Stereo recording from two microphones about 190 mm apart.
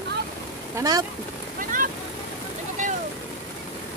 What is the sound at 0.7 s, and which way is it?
Speech, 20° right (ahead or behind).